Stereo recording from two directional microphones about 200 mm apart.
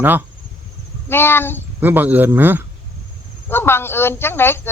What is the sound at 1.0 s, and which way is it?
Speech, 10° left (ahead or behind).